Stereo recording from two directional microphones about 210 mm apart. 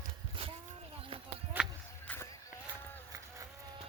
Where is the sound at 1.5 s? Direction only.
10° right (ahead or behind).